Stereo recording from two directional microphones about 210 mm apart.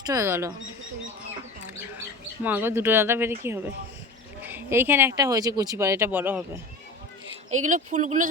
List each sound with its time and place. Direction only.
0.0 s speech: 15° right (ahead or behind)
2.4 s speech: 10° right (ahead or behind)
4.4 s speech: 10° right (ahead or behind)
7.5 s speech: 35° right (ahead or behind)